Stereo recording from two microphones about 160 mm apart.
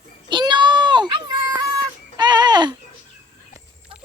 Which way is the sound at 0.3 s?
30° right (ahead or behind).